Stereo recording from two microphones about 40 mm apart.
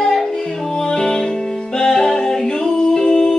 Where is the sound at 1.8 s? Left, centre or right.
Centre.